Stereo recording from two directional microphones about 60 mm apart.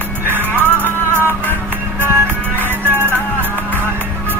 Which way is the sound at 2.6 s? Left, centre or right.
Right.